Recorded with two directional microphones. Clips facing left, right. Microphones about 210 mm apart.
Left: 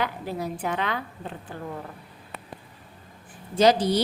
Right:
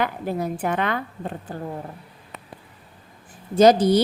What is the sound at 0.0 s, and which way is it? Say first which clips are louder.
A woman's voice: right 4 dB; 50° right (ahead or behind).